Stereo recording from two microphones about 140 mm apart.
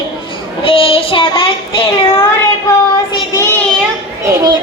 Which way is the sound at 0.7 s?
40° left (ahead or behind).